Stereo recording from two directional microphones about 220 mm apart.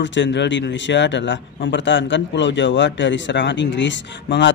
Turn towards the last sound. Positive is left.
turn(degrees=55)  # may be behind; listen again after turning